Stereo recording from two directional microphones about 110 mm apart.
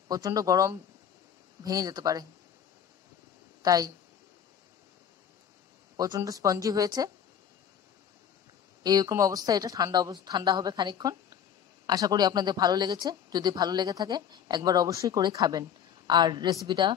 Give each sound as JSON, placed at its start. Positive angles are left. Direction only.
{"t": 0.1, "sound": "a woman's voice", "side_deg": -35}
{"t": 3.6, "sound": "a woman's voice", "side_deg": -35}
{"t": 5.9, "sound": "a woman's voice", "side_deg": -35}
{"t": 8.8, "sound": "a woman's voice", "side_deg": -35}